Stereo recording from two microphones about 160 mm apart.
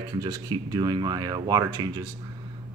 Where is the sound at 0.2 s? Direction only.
25° right (ahead or behind).